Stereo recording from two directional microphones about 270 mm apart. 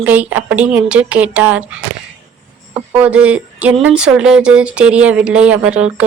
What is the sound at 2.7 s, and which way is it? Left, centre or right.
Speech, centre.